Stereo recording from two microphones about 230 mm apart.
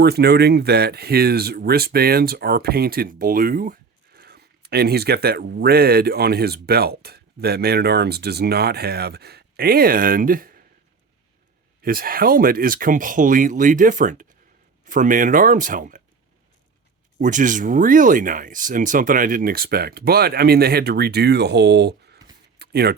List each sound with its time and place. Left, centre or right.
0.0 s speech: right
11.8 s speech: right
17.2 s speech: right